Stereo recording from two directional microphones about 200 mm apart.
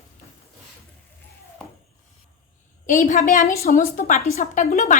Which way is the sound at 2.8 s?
40° left (ahead or behind).